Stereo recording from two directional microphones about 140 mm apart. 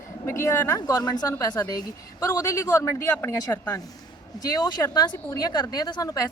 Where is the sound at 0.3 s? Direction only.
20° left (ahead or behind).